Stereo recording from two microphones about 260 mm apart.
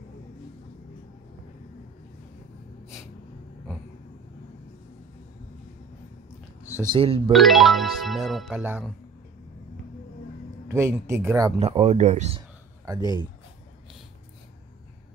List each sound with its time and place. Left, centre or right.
6.8 s speech: centre
7.3 s speech: centre
10.7 s speech: centre